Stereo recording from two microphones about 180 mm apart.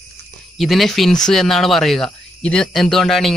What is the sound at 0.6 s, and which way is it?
Speech, centre (ahead or behind).